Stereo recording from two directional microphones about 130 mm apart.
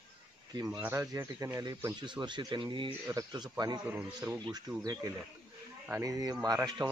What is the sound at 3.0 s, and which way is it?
Speech, 25° right (ahead or behind).